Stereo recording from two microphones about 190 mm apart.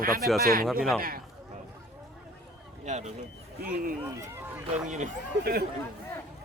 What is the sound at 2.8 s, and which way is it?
Speech, 40° right (ahead or behind).